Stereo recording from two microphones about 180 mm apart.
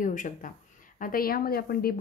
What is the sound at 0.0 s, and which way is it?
Speech, 45° left (ahead or behind).